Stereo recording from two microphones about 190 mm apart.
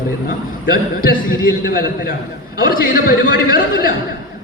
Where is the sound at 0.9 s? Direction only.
50° left (ahead or behind).